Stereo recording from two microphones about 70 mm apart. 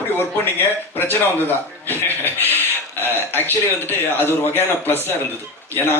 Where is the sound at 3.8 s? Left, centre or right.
Left.